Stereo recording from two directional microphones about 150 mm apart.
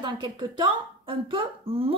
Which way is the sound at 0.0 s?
30° right (ahead or behind).